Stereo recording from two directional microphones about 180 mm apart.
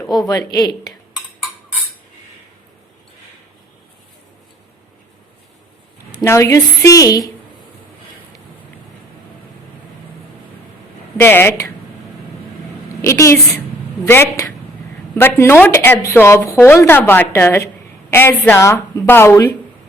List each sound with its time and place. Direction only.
0.2 s a woman's voice: 20° left (ahead or behind)
6.1 s speech: 15° left (ahead or behind)
11.2 s speech: 10° left (ahead or behind)
13.0 s a woman's voice: 15° left (ahead or behind)